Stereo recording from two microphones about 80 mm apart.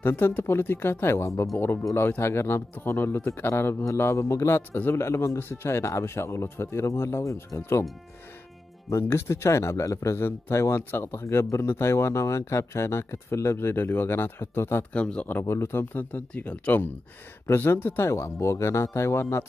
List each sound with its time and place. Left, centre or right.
0.0 s speech: left
4.6 s speech: left
8.9 s speech: left
14.9 s speech: centre
15.2 s speech: left